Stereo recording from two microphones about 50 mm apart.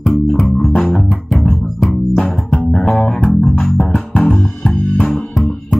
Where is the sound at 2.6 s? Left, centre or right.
Centre.